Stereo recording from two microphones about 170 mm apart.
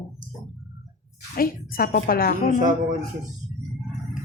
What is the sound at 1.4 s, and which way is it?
Speech, 60° left (ahead or behind).